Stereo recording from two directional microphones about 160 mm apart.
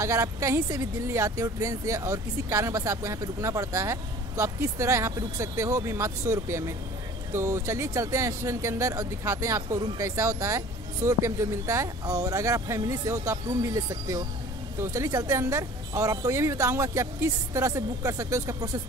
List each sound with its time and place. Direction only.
0.0 s speech: 20° right (ahead or behind)